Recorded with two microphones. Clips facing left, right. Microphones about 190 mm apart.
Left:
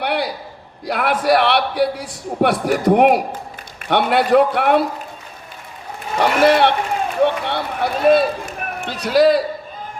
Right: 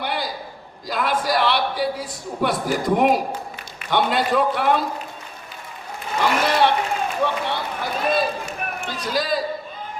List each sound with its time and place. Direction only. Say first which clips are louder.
0.0 s a sound: left 6 dB; 65° left (ahead or behind)
0.9 s a man's voice: left 6 dB; 65° left (ahead or behind)
6.1 s a man's voice: left 6 dB; 65° left (ahead or behind)
7.3 s run: left 4 dB; 65° left (ahead or behind)